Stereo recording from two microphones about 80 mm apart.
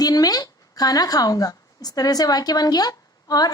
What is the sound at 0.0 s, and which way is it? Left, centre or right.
A woman's voice, left.